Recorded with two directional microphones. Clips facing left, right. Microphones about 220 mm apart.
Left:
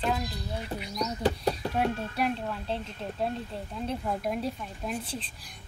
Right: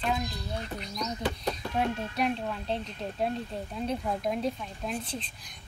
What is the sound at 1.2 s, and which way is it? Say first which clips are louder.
Speech: left 7 dB; 35° left (ahead or behind).